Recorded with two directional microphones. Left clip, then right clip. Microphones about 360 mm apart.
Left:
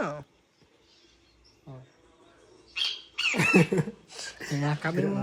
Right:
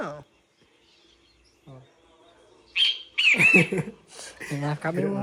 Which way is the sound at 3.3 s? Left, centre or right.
Centre.